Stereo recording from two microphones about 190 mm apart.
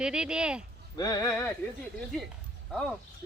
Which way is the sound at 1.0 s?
15° left (ahead or behind).